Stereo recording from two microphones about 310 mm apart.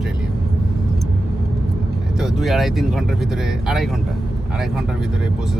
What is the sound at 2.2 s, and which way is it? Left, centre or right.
Speech, centre.